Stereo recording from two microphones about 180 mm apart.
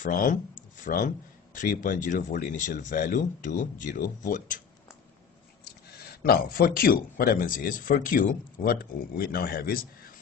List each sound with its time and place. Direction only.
0.0 s speech: 50° left (ahead or behind)
5.9 s speech: 55° left (ahead or behind)